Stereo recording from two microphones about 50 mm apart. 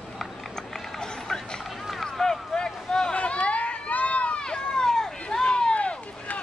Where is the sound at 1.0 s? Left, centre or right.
Centre.